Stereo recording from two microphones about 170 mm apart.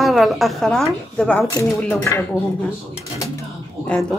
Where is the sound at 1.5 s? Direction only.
15° left (ahead or behind).